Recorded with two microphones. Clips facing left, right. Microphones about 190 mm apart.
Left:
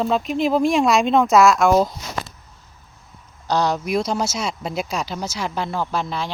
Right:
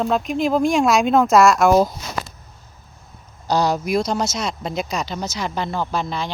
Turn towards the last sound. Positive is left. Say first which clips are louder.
# even
turn(degrees=5)  # may be behind; listen again after turning